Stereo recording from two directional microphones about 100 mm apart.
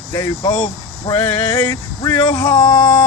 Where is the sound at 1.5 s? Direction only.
25° left (ahead or behind).